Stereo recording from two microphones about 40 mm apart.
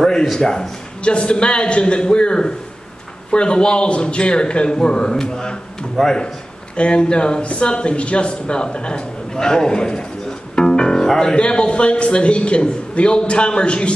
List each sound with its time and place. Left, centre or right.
0.0 s a man's voice: centre
6.8 s a man's voice: left
10.5 s music: centre
11.3 s a man's voice: left